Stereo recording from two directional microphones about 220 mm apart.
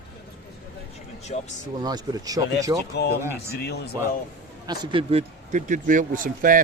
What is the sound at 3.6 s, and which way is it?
Speech, 50° left (ahead or behind).